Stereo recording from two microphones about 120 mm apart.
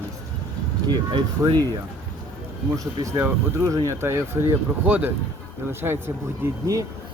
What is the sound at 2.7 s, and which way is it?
Speech, 30° right (ahead or behind).